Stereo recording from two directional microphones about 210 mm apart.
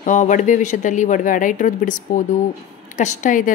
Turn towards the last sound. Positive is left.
turn(degrees=40)  # may be behind; listen again after turning